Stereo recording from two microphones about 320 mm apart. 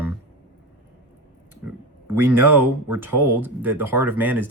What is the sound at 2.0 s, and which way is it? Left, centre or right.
Speech, centre.